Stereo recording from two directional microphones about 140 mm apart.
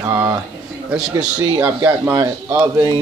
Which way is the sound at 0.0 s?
20° right (ahead or behind).